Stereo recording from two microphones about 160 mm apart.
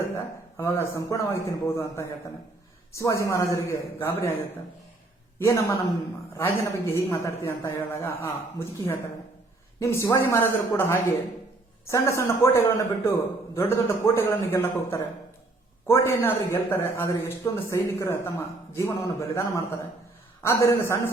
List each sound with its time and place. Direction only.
0.1 s a man's voice: 15° left (ahead or behind)
5.4 s a man's voice: 15° left (ahead or behind)